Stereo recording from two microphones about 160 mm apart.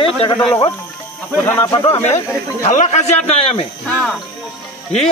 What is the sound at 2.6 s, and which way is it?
Speech, 45° left (ahead or behind).